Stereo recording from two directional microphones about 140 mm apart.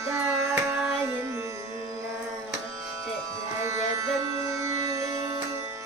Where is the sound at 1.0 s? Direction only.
20° right (ahead or behind).